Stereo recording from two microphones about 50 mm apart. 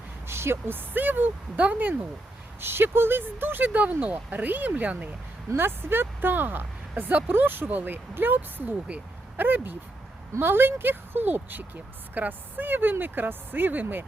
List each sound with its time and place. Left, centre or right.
0.3 s speech: right
0.9 s speech: right
2.6 s speech: right
5.5 s speech: right